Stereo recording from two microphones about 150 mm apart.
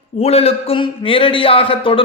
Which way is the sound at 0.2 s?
40° left (ahead or behind).